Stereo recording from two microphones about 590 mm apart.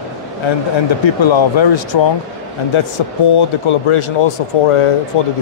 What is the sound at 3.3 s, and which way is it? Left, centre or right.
A man's voice, left.